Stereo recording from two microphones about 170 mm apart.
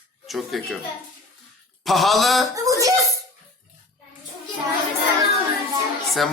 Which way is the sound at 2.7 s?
20° right (ahead or behind).